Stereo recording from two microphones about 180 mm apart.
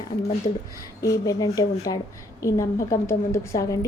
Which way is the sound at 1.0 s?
20° left (ahead or behind).